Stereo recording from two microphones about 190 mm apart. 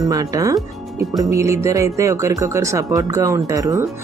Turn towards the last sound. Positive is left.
turn(degrees=-20)  # may be behind; listen again after turning